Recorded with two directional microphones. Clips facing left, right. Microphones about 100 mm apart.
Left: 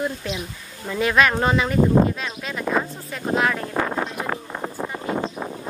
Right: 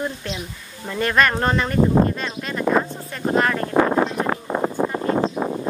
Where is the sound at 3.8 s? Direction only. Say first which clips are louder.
Right 6 dB; 40° right (ahead or behind).